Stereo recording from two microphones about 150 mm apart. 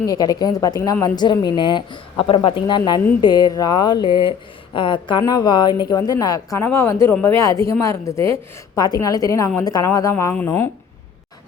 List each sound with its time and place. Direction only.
0.0 s speech: 25° left (ahead or behind)